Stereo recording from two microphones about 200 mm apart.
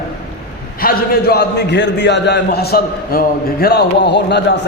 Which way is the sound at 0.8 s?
50° left (ahead or behind).